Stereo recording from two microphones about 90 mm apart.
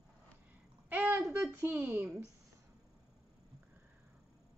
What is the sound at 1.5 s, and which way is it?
Speech, 25° right (ahead or behind).